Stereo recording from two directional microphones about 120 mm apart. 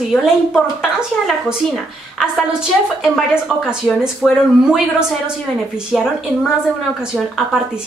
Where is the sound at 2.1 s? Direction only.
Centre (ahead or behind).